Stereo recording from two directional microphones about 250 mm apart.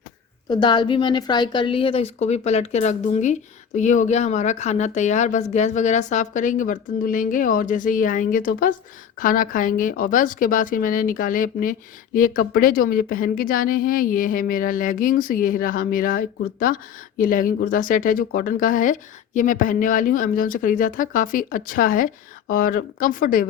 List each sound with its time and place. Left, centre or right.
0.4 s a woman's voice: centre; by 23.5 s left